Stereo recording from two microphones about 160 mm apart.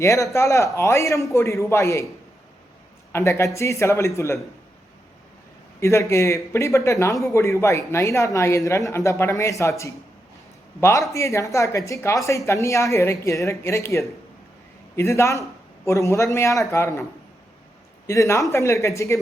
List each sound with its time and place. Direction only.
0.0 s speech: 20° left (ahead or behind)
3.1 s speech: 15° left (ahead or behind)
5.8 s speech: 20° left (ahead or behind)